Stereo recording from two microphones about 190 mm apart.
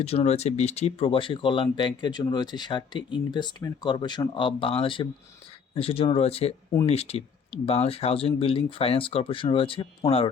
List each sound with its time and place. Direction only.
0.0 s speech: 35° left (ahead or behind)